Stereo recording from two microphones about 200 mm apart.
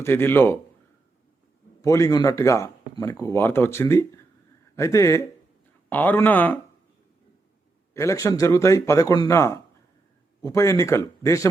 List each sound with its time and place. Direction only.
0.0 s speech: 10° left (ahead or behind)
1.8 s speech: 15° left (ahead or behind)
7.9 s speech: 15° left (ahead or behind)